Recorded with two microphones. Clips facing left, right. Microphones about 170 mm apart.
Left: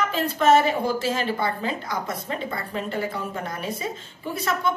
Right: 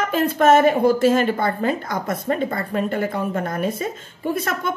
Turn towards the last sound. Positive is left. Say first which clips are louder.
# right 3 dB
turn(degrees=-50)  # may be behind; listen again after turning